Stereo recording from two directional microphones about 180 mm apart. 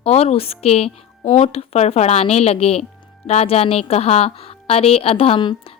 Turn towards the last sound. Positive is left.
turn(degrees=30)  # may be behind; listen again after turning